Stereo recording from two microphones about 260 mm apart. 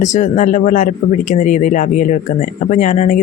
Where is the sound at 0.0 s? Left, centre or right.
Left.